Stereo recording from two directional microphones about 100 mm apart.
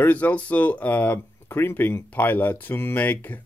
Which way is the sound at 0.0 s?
15° left (ahead or behind).